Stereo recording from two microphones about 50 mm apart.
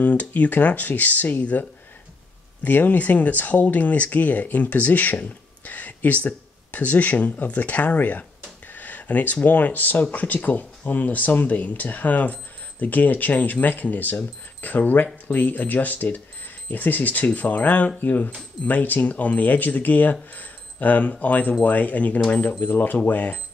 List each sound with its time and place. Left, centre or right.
0.0 s speech: left
5.7 s a sound: left
6.2 s speech: left